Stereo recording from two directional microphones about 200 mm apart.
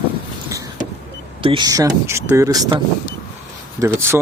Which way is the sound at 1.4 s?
25° right (ahead or behind).